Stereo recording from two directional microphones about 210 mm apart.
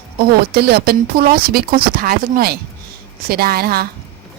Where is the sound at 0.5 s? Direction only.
45° right (ahead or behind).